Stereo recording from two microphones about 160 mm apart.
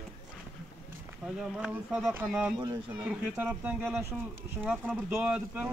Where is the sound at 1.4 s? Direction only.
5° right (ahead or behind).